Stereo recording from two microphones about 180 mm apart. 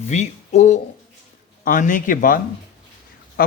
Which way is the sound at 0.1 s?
40° left (ahead or behind).